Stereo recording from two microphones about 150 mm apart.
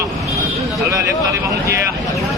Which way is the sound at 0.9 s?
20° right (ahead or behind).